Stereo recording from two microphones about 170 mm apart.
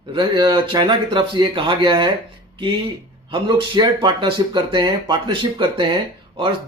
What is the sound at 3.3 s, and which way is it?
Speech, 25° right (ahead or behind).